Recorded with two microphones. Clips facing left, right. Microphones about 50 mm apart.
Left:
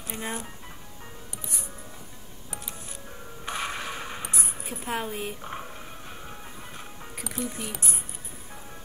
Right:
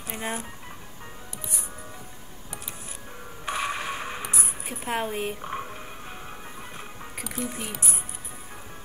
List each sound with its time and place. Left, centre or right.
0.1 s speech: centre
3.4 s music: centre
7.3 s speech: centre